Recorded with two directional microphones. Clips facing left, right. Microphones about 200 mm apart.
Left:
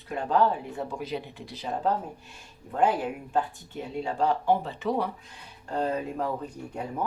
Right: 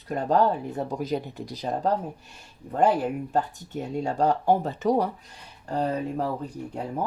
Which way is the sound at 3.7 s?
45° right (ahead or behind).